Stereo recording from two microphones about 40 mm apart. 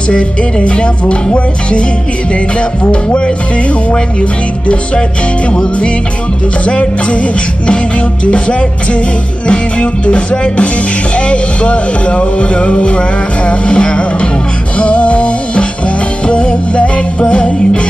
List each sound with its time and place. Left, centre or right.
0.1 s speech: left
2.8 s speech: left
9.5 s speech: left
14.8 s music: left
16.3 s speech: left